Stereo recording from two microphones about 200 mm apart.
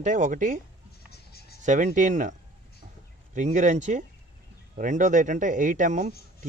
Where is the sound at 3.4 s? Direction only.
40° right (ahead or behind).